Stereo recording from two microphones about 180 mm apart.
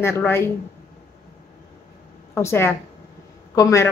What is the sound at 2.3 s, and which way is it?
Speech, 15° left (ahead or behind).